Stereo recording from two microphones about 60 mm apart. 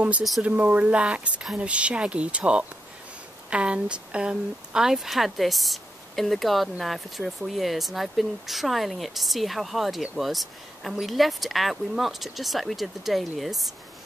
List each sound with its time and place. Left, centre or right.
0.4 s speech: right; by 13.7 s centre